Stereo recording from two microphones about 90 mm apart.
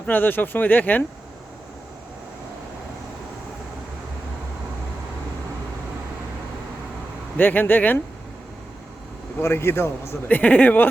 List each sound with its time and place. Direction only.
0.0 s speech: 20° left (ahead or behind)
7.3 s speech: 20° left (ahead or behind)
9.4 s speech: 30° left (ahead or behind)
10.2 s a man's voice: 15° left (ahead or behind)